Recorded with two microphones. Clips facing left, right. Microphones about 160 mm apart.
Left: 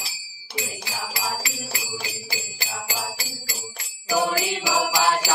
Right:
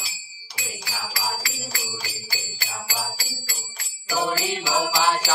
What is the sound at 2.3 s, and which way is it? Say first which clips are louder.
Jingle bell: left 2 dB; 20° left (ahead or behind).